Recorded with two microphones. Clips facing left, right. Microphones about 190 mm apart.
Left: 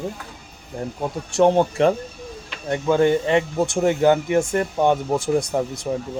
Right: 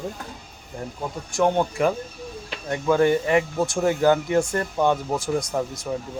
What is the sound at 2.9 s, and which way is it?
Speech, 20° left (ahead or behind).